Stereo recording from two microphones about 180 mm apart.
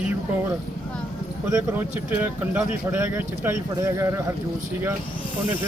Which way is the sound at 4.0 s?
15° right (ahead or behind).